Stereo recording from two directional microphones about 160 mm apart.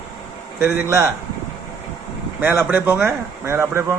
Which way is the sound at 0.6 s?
15° right (ahead or behind).